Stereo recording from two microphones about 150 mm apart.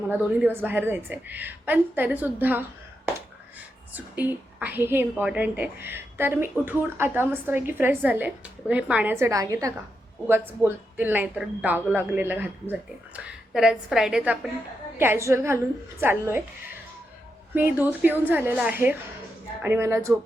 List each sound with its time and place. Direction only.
0.1 s a woman's voice: 10° right (ahead or behind)
3.9 s a woman's voice: 10° right (ahead or behind)
17.5 s a woman's voice: 15° right (ahead or behind)